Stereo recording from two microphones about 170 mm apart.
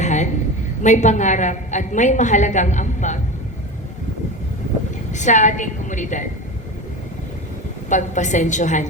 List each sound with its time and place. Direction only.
0.0 s a sound: 45° left (ahead or behind)
0.8 s a woman's voice: 45° left (ahead or behind)
5.1 s a woman's voice: 45° left (ahead or behind)
7.9 s a woman's voice: 45° left (ahead or behind)